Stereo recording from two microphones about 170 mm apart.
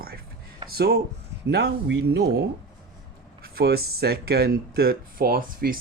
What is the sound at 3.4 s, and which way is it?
Speech, 65° right (ahead or behind).